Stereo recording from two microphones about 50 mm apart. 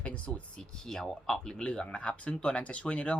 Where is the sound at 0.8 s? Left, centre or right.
Centre.